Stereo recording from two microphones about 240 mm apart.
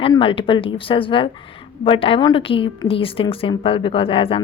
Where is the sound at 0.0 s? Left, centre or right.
Left.